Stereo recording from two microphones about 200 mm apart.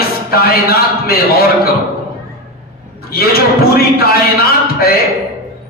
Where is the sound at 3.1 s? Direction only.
50° left (ahead or behind).